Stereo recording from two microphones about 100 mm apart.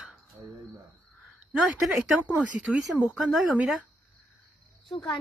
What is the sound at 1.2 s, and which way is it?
A woman's voice, 5° right (ahead or behind).